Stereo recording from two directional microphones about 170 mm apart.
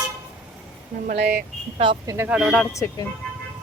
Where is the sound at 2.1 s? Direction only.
15° right (ahead or behind).